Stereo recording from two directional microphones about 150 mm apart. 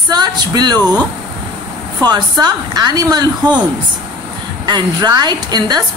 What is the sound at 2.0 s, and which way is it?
A woman's voice, 30° right (ahead or behind).